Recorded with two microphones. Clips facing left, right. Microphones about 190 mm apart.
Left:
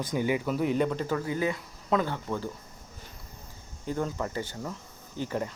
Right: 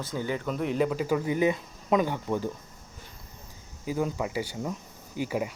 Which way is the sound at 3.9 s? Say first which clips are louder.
Right 2 dB; 10° right (ahead or behind).